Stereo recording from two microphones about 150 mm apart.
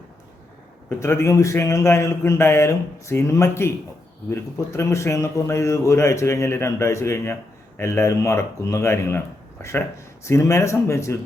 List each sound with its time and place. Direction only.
0.9 s a man's voice: 15° left (ahead or behind)